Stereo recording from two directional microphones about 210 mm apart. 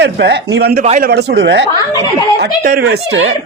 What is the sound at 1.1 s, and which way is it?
Speech, 50° right (ahead or behind).